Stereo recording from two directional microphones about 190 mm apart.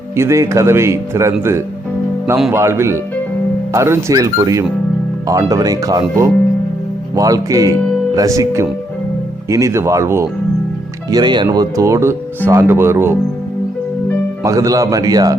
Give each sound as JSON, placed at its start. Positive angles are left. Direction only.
{"t": 0.2, "sound": "a man's voice", "side_deg": -15}
{"t": 14.4, "sound": "a man's voice", "side_deg": -15}